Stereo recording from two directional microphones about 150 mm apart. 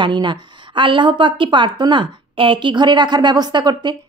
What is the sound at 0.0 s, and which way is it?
A woman's voice, 30° right (ahead or behind).